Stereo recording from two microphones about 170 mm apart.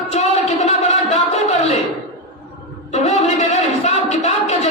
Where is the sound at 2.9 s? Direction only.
40° left (ahead or behind).